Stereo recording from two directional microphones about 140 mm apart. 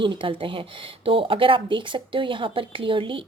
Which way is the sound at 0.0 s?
35° right (ahead or behind).